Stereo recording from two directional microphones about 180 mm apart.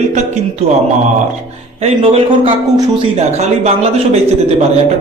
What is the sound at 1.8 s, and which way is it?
Speech, 35° right (ahead or behind).